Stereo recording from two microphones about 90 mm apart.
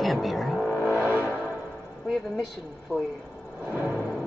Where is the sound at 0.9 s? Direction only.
20° right (ahead or behind).